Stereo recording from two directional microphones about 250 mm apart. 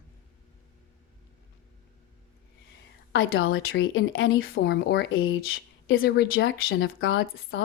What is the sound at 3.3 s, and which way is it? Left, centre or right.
Speech, left.